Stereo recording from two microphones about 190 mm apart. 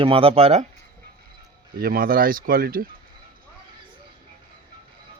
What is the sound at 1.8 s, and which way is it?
Speech, 50° right (ahead or behind).